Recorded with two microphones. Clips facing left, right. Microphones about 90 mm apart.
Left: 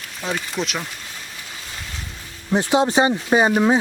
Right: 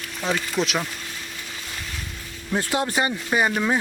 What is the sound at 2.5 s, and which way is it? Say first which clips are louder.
Speech: left 6 dB; 20° left (ahead or behind).